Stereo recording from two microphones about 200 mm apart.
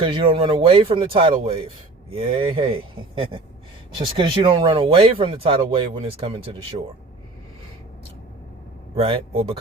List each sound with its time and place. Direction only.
0.0 s speech: 25° right (ahead or behind)
3.9 s speech: 25° right (ahead or behind)
9.0 s speech: 25° right (ahead or behind)